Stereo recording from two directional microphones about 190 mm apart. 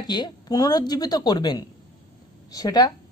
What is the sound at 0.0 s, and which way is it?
Speech, 20° left (ahead or behind).